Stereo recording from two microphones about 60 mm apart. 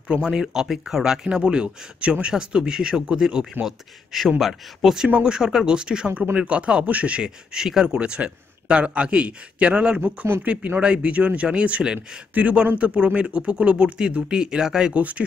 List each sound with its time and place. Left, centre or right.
0.3 s speech: centre
3.6 s a man's voice: centre
5.2 s a man's voice: centre
7.2 s a man's voice: centre
15.0 s a man's voice: right